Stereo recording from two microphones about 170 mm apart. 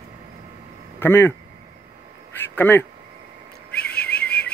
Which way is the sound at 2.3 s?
10° left (ahead or behind).